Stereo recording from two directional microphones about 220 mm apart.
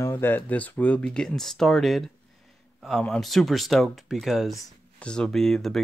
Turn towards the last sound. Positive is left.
turn(degrees=0)  # may be behind; listen again after turning